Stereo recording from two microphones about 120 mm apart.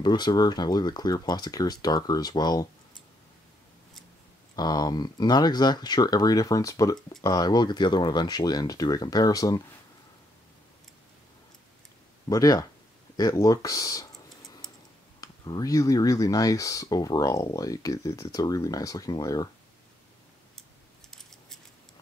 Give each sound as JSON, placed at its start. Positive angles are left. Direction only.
{"t": 0.0, "sound": "speech", "side_deg": 35}
{"t": 4.6, "sound": "speech", "side_deg": 35}
{"t": 12.3, "sound": "speech", "side_deg": 30}
{"t": 14.6, "sound": "typing", "side_deg": 5}
{"t": 15.1, "sound": "speech", "side_deg": 35}
{"t": 21.1, "sound": "a sound", "side_deg": 5}